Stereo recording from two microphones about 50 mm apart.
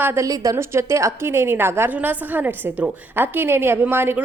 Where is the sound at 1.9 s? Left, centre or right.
Right.